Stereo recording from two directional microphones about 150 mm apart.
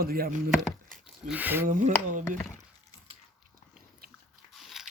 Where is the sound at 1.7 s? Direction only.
60° right (ahead or behind).